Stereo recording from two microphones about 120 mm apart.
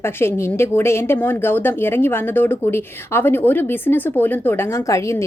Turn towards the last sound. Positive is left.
turn(degrees=25)  # may be behind; listen again after turning